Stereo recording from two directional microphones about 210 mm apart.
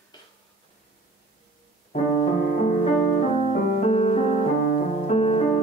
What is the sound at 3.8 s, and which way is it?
Music, 35° left (ahead or behind).